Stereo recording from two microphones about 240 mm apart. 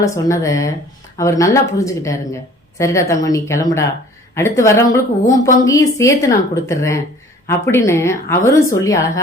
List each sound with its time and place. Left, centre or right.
0.0 s speech: centre